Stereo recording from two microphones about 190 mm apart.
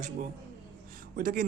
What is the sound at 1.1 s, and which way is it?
Speech, 45° right (ahead or behind).